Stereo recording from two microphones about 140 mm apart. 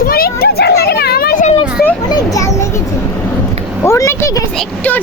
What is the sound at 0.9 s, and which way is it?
Children playing, 90° left.